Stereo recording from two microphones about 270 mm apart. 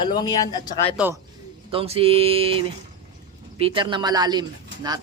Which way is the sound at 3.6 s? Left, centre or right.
Centre.